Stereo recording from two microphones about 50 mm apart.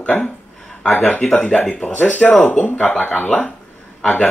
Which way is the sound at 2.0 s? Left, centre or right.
Left.